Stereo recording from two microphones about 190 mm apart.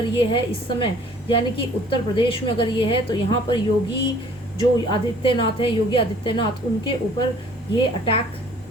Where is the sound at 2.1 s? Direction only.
25° left (ahead or behind).